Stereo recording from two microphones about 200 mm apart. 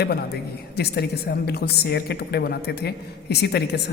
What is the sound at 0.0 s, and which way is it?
A man's voice, 50° left (ahead or behind).